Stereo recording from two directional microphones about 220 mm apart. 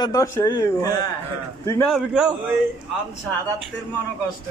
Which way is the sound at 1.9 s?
5° right (ahead or behind).